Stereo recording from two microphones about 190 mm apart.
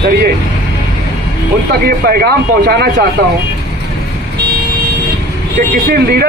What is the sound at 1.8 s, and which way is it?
Speech, 55° right (ahead or behind).